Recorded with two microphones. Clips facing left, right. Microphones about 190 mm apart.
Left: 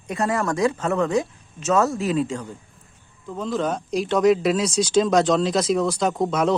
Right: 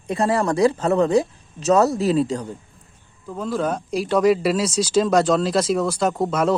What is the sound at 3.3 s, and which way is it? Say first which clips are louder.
A man's voice: right 1 dB; 10° right (ahead or behind).